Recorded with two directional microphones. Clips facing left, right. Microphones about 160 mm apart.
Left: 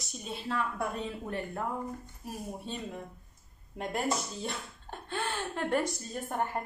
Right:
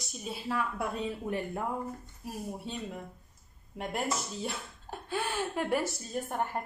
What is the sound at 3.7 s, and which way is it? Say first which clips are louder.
Speech: left 1 dB; 5° right (ahead or behind).